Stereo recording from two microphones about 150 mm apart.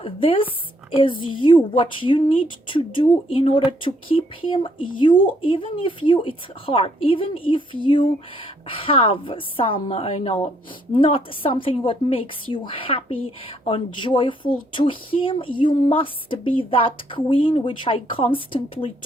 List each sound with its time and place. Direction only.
0.0 s speech: 35° left (ahead or behind)